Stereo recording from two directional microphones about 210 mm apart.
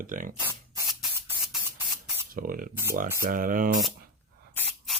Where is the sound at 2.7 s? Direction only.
10° right (ahead or behind).